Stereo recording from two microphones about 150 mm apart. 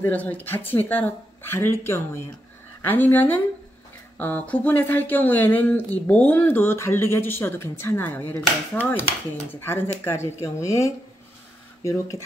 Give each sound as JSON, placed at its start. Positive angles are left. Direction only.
{"t": 0.0, "sound": "speech", "side_deg": 10}